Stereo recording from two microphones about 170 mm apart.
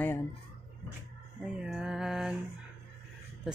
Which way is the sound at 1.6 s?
5° right (ahead or behind).